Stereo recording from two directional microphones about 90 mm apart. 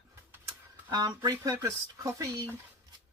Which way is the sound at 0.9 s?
45° right (ahead or behind).